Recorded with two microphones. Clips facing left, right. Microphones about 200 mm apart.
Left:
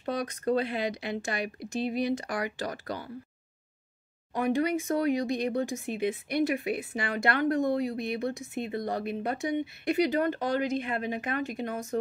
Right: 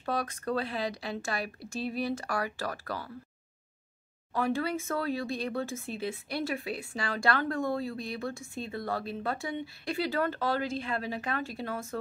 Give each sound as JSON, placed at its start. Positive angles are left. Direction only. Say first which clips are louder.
{"t": 0.0, "sound": "speech", "louder": "left 2 dB", "side_deg": 20}
{"t": 4.3, "sound": "speech", "louder": "left 3 dB", "side_deg": 20}